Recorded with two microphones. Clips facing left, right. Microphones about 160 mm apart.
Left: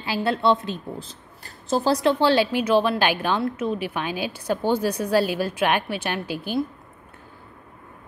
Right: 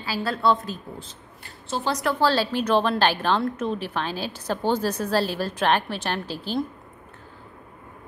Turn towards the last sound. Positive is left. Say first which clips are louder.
# left 1 dB
turn(degrees=10)  # may be behind; listen again after turning